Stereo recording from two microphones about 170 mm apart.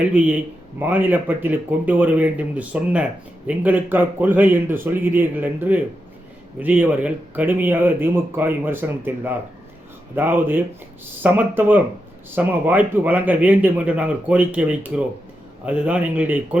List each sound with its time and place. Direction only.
0.0 s speech: 10° right (ahead or behind)